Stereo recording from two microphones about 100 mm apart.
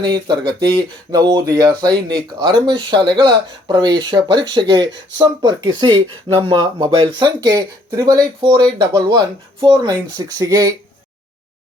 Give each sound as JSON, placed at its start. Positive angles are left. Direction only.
{"t": 0.0, "sound": "speech", "side_deg": -50}
{"t": 8.4, "sound": "speech", "side_deg": -50}